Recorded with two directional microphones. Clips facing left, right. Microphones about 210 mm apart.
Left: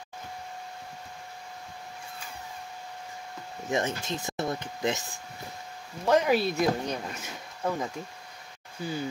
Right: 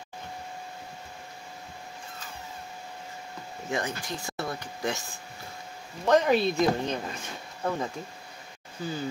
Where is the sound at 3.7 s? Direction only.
25° left (ahead or behind).